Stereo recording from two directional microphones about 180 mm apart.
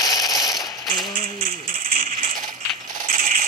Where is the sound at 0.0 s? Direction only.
20° left (ahead or behind).